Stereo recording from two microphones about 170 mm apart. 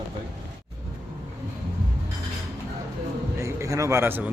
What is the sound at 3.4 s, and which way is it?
Speech, 20° right (ahead or behind).